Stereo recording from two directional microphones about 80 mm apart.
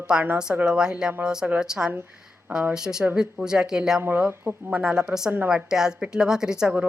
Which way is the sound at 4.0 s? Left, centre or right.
Right.